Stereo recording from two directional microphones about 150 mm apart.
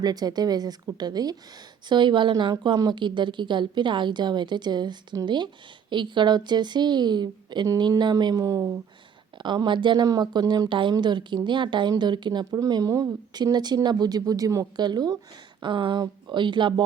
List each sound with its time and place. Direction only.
0.0 s speech: 25° right (ahead or behind)